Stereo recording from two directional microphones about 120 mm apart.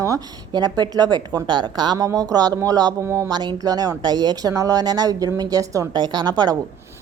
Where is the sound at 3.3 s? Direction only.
35° right (ahead or behind).